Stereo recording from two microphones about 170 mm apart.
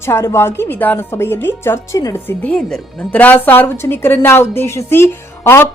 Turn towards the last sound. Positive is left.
turn(degrees=15)  # may be behind; listen again after turning